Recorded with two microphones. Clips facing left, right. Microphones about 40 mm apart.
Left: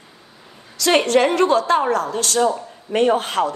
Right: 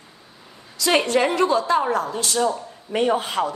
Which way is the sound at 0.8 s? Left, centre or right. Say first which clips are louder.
Left 3 dB; left.